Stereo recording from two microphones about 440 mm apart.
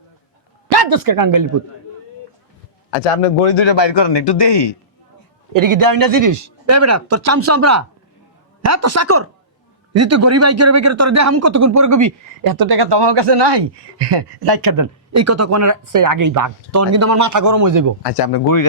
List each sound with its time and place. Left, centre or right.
0.7 s speech: right
3.4 s speech: left
5.5 s speech: right
18.0 s speech: left